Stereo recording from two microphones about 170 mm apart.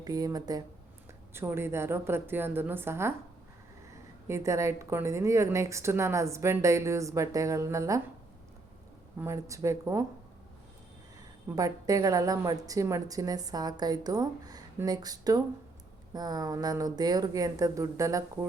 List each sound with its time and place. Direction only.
0.0 s a woman's voice: 20° right (ahead or behind)
4.3 s a woman's voice: 15° right (ahead or behind)
9.1 s a woman's voice: 15° right (ahead or behind)
11.4 s a woman's voice: 20° right (ahead or behind)